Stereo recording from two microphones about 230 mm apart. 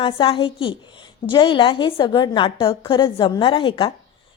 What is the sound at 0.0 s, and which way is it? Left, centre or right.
A woman's voice, left.